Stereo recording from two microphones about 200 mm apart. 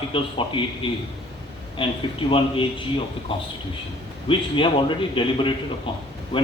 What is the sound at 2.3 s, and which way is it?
Speech, 25° left (ahead or behind).